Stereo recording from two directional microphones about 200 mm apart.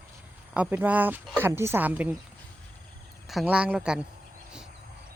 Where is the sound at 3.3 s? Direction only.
5° right (ahead or behind).